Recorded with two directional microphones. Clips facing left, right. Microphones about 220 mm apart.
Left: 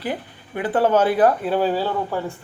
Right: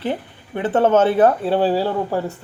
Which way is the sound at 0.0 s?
25° right (ahead or behind).